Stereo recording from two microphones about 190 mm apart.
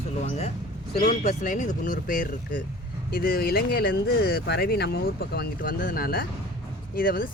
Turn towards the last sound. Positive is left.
turn(degrees=50)  # may be behind; listen again after turning